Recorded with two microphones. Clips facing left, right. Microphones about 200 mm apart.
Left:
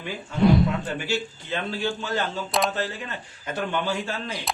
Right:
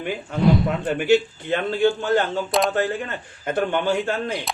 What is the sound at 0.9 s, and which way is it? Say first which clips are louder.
Speech: right 10 dB; 55° right (ahead or behind).